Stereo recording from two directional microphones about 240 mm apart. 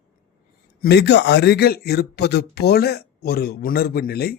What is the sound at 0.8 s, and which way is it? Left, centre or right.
Speech, left.